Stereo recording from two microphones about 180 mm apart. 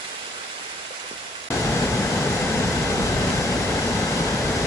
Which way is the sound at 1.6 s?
15° left (ahead or behind).